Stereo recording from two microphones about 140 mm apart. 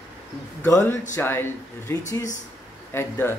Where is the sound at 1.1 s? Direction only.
15° left (ahead or behind).